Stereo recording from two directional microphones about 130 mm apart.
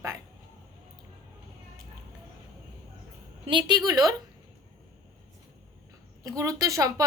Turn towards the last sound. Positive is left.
turn(degrees=-25)  # may be behind; listen again after turning